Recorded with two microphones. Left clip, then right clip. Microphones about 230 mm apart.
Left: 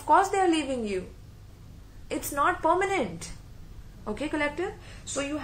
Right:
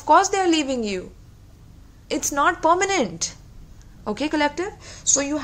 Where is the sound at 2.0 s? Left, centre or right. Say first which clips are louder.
Right 6 dB; right.